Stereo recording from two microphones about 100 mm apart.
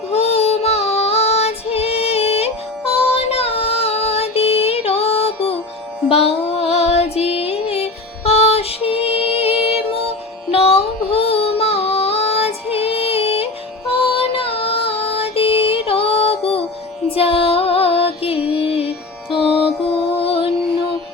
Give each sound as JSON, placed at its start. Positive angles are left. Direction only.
{"t": 0.1, "sound": "female singing", "side_deg": 90}
{"t": 6.1, "sound": "music", "side_deg": 80}
{"t": 13.9, "sound": "music", "side_deg": 65}
{"t": 19.4, "sound": "music", "side_deg": -10}
{"t": 20.1, "sound": "music", "side_deg": 70}